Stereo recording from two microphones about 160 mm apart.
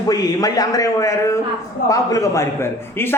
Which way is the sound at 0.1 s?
25° left (ahead or behind).